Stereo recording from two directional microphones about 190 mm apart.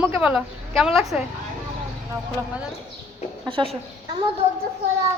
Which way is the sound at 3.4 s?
30° right (ahead or behind).